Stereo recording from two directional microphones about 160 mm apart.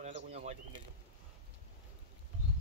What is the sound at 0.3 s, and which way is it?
Bird, 45° right (ahead or behind).